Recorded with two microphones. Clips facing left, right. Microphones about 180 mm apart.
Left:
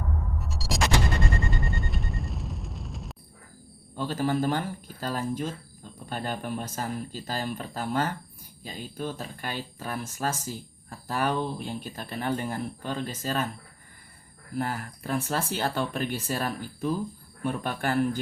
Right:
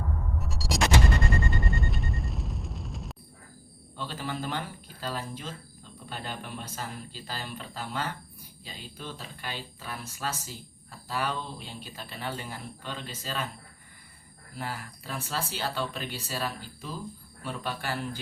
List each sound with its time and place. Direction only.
0.3 s a sound: centre (ahead or behind)
1.5 s explosion: centre (ahead or behind)
3.9 s speech: 45° left (ahead or behind)
14.5 s speech: 50° left (ahead or behind)